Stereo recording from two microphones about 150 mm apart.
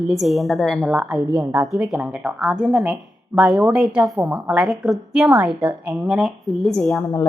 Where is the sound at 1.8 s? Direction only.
5° right (ahead or behind).